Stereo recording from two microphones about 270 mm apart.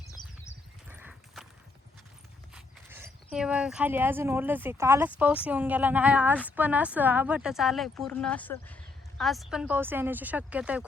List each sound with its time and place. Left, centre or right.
0.2 s a sound: centre
0.9 s clip-clop: centre
2.6 s speech: centre